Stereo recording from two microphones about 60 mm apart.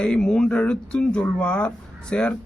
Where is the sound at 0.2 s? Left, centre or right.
Centre.